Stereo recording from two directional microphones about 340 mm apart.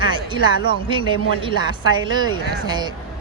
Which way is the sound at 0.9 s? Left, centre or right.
Centre.